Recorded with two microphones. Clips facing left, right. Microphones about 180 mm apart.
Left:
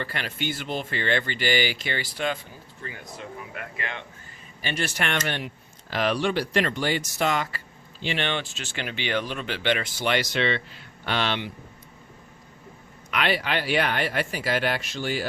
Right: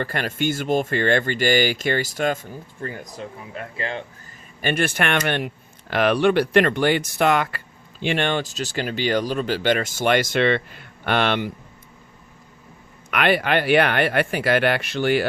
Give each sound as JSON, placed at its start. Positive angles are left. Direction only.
{"t": 0.0, "sound": "speech", "side_deg": -45}
{"t": 3.5, "sound": "speech", "side_deg": -30}
{"t": 4.6, "sound": "speech", "side_deg": -55}
{"t": 13.1, "sound": "speech", "side_deg": -55}